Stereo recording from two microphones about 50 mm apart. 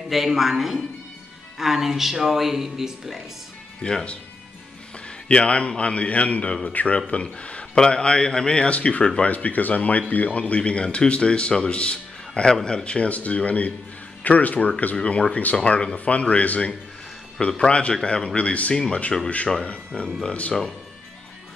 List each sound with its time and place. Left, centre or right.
0.1 s speech: centre
3.8 s a man's voice: centre
15.0 s speech: left
19.9 s speech: centre
20.2 s speech: left